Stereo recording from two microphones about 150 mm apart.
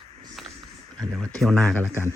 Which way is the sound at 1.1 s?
5° left (ahead or behind).